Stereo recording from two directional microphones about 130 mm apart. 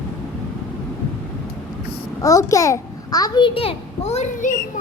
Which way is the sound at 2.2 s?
25° left (ahead or behind).